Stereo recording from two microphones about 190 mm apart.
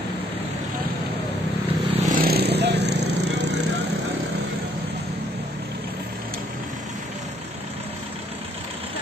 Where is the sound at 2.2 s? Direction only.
55° right (ahead or behind).